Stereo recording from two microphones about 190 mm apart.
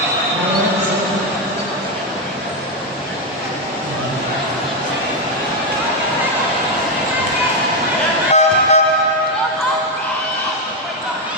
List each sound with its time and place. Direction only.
8.3 s music: 35° left (ahead or behind)